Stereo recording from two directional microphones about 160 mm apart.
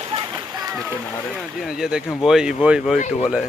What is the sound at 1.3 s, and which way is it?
Speech, 5° right (ahead or behind).